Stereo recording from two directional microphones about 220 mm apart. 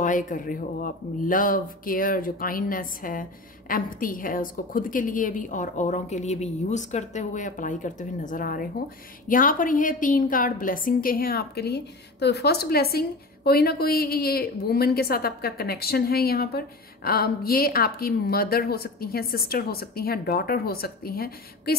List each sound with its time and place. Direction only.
0.0 s a woman's voice: 35° left (ahead or behind)